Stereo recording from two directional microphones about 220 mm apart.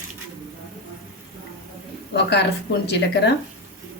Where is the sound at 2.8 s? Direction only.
50° left (ahead or behind).